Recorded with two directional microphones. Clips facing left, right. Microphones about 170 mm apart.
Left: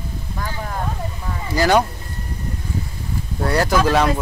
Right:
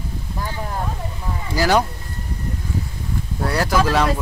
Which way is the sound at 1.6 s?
5° right (ahead or behind).